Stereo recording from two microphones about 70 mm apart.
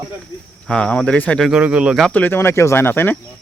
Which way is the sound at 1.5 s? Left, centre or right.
Centre.